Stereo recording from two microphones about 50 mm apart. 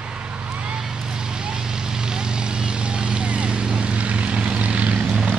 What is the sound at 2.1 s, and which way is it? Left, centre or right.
Vehicle, centre.